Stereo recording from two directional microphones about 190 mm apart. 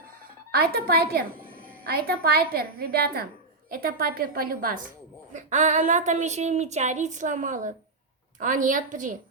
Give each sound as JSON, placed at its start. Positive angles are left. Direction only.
{"t": 0.5, "sound": "a woman's voice", "side_deg": -50}
{"t": 5.3, "sound": "a woman's voice", "side_deg": -40}